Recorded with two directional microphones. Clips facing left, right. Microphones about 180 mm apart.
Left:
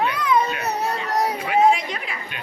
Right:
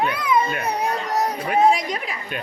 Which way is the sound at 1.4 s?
40° right (ahead or behind).